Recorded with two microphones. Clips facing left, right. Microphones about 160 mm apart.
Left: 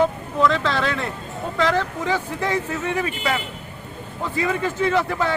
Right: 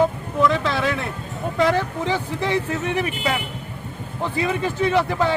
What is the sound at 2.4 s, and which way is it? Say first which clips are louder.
Speech: right 3 dB; 30° right (ahead or behind).